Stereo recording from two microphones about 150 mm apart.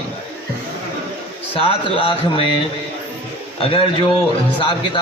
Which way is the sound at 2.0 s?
35° left (ahead or behind).